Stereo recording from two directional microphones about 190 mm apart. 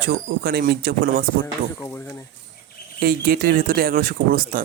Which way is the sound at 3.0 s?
50° right (ahead or behind).